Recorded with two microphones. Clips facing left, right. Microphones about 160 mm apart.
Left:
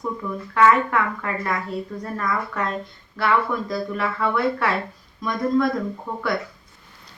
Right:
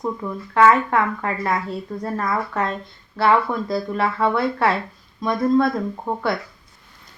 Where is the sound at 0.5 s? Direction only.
30° right (ahead or behind).